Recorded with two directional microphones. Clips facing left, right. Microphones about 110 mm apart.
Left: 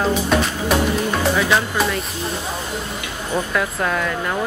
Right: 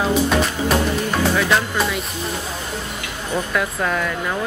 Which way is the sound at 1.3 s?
5° left (ahead or behind).